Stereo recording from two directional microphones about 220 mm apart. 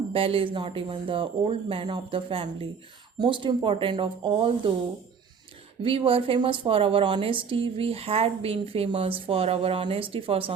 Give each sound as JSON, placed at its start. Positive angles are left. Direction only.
{"t": 0.1, "sound": "a woman's voice", "side_deg": -25}
{"t": 5.8, "sound": "a woman's voice", "side_deg": -25}